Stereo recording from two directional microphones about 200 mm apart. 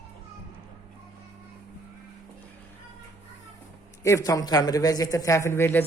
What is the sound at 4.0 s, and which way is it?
Speech, 15° left (ahead or behind).